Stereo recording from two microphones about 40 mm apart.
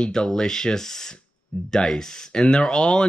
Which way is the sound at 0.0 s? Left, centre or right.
Centre.